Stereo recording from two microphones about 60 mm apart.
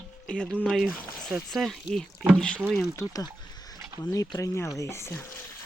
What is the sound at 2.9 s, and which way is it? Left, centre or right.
Speech, left.